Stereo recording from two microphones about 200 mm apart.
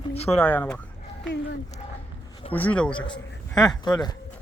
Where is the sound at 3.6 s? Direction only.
20° left (ahead or behind).